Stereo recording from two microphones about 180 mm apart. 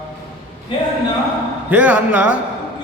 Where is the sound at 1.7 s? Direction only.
10° right (ahead or behind).